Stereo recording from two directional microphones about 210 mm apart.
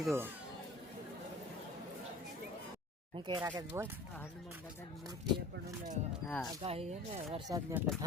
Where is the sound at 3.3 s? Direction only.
20° right (ahead or behind).